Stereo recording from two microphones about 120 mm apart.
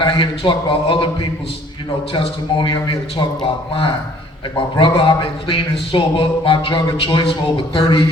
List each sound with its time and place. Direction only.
0.0 s speech: 45° left (ahead or behind)
2.1 s speech: 45° left (ahead or behind)